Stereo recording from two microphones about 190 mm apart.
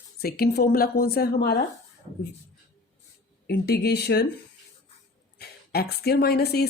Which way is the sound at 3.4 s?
60° left (ahead or behind).